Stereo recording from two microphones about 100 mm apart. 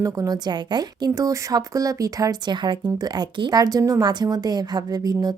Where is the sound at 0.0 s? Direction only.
35° right (ahead or behind).